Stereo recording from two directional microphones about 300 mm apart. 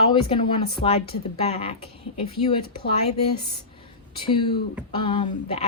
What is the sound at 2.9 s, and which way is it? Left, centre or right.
A woman's voice, left.